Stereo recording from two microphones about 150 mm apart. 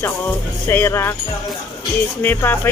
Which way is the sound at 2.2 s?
15° left (ahead or behind).